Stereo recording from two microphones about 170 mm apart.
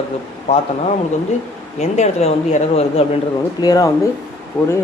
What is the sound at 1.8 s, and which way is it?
Speech, 40° left (ahead or behind).